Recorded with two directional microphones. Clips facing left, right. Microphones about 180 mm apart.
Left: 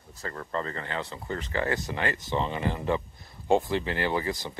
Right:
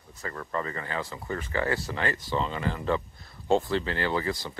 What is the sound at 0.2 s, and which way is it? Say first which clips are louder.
Speech: even; 30° left (ahead or behind).